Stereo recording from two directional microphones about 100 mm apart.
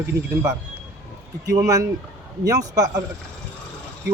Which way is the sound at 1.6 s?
35° right (ahead or behind).